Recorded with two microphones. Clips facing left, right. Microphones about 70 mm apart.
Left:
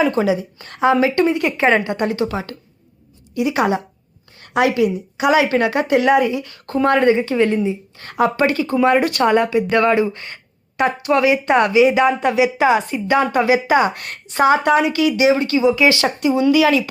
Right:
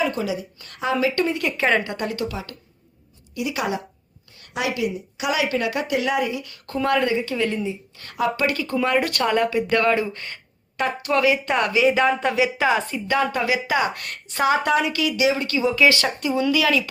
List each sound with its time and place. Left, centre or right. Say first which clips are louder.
0.0 s a woman's voice: left 7 dB; left
4.4 s a woman's voice: left 9 dB; left